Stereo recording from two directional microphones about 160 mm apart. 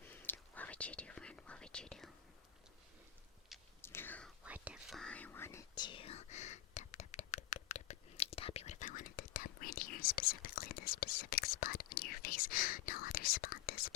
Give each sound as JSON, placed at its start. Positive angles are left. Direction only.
{"t": 0.0, "sound": "whispering", "side_deg": 10}
{"t": 3.8, "sound": "whispering", "side_deg": 15}
{"t": 4.4, "sound": "whispering", "side_deg": -10}